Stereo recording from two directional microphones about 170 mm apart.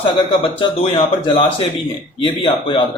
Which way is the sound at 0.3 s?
35° left (ahead or behind).